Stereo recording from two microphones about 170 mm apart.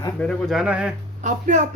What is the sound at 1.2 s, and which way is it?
Speech, 45° right (ahead or behind).